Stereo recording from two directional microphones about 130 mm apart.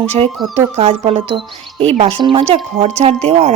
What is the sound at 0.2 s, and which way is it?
Speech, 50° right (ahead or behind).